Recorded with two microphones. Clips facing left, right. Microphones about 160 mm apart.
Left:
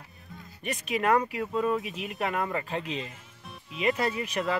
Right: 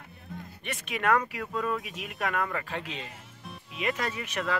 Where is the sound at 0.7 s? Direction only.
35° left (ahead or behind).